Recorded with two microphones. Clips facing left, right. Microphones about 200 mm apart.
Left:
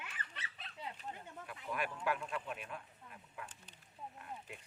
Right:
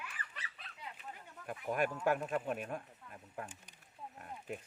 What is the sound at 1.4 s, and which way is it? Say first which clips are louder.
Speech: right 7 dB; 45° right (ahead or behind).